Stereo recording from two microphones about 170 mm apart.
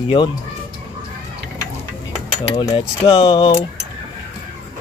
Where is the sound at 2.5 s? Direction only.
25° left (ahead or behind).